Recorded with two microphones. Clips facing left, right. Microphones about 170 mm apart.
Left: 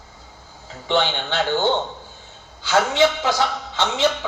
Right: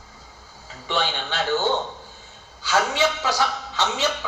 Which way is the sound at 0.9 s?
20° left (ahead or behind).